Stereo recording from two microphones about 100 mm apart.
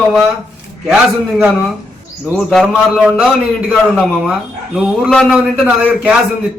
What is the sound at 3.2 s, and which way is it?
A man's voice, 10° right (ahead or behind).